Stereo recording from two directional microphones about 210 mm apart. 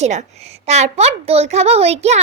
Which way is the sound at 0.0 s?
35° right (ahead or behind).